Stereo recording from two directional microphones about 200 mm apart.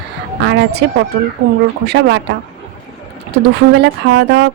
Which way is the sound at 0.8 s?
55° right (ahead or behind).